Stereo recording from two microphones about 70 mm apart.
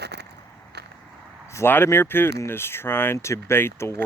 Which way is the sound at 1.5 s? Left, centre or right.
Left.